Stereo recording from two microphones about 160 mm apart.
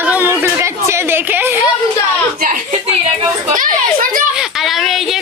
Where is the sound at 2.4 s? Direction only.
55° right (ahead or behind).